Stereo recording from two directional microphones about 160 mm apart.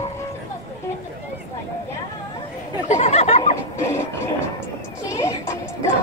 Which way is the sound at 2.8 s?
45° left (ahead or behind).